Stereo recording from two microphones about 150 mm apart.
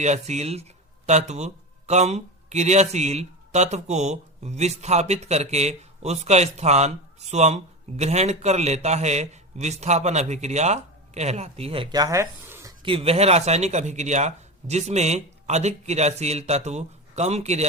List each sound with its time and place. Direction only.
0.0 s speech: 50° right (ahead or behind); by 12.7 s 15° right (ahead or behind)
12.8 s speech: 40° right (ahead or behind)